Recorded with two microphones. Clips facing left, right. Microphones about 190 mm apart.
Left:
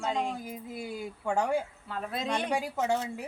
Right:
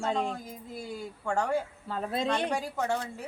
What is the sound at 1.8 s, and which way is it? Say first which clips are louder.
Speech: right 3 dB; 30° right (ahead or behind).